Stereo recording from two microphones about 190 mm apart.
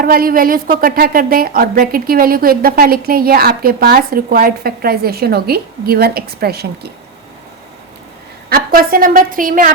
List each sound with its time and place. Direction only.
0.0 s a woman's voice: 50° right (ahead or behind)
8.4 s a woman's voice: 50° right (ahead or behind)